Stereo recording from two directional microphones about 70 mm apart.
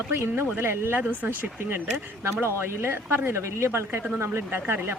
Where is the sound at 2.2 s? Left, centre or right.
Right.